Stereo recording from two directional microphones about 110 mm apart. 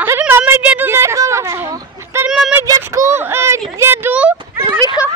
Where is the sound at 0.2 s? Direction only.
15° right (ahead or behind).